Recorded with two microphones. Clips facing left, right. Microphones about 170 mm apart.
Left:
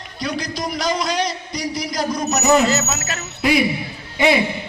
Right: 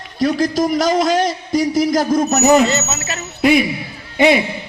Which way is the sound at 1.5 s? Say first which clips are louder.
Right 12 dB; 50° right (ahead or behind).